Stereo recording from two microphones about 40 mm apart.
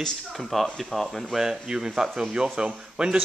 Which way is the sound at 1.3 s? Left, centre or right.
Centre.